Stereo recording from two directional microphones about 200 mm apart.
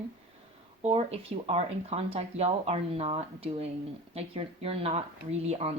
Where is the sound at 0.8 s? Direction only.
30° right (ahead or behind).